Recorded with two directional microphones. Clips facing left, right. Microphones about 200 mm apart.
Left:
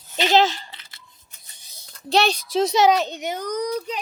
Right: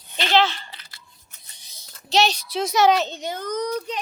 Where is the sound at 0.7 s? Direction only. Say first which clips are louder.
Right 1 dB; 25° left (ahead or behind).